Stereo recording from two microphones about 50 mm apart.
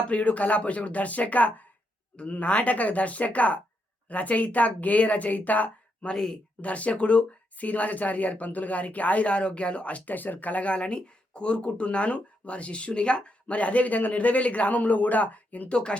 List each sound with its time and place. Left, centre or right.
0.1 s speech: left
15.7 s speech: centre